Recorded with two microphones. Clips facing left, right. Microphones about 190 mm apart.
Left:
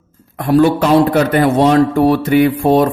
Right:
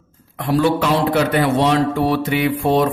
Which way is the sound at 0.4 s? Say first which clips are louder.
Left 5 dB; 50° left (ahead or behind).